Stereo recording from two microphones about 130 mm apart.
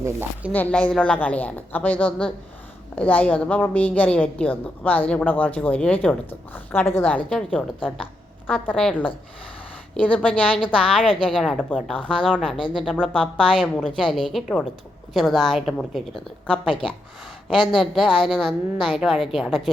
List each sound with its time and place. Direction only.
0.0 s speech: 15° right (ahead or behind)
0.5 s a woman's voice: 10° left (ahead or behind)